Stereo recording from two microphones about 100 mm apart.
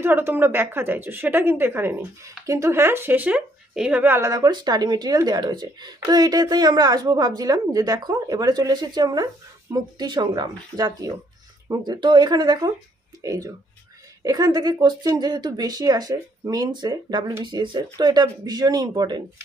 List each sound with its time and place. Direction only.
0.0 s speech: 20° right (ahead or behind)
4.2 s speech: 35° right (ahead or behind)